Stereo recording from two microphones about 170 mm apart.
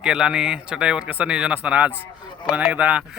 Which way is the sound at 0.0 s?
5° right (ahead or behind).